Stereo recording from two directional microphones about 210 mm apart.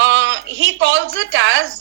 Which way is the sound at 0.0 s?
65° right (ahead or behind).